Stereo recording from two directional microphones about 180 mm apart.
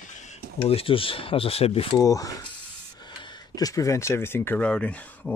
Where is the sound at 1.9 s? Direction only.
20° left (ahead or behind).